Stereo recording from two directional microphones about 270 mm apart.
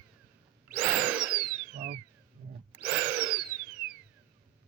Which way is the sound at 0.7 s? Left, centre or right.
Centre.